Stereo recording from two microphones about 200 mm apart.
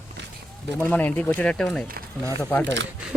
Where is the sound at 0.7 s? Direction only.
10° left (ahead or behind).